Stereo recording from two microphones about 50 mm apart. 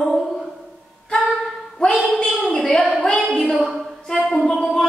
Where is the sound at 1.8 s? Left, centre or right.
Centre.